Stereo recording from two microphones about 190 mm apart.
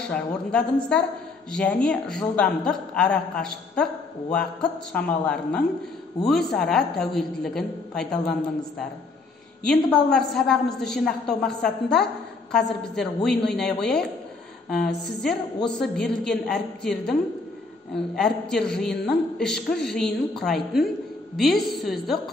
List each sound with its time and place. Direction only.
0.1 s a woman's voice: 5° left (ahead or behind)
15.8 s a woman's voice: 5° left (ahead or behind)